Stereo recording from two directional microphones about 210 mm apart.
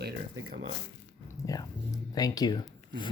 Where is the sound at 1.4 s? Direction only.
15° left (ahead or behind).